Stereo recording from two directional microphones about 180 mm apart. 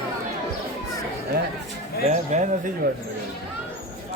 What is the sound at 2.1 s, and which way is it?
Speech, 40° right (ahead or behind).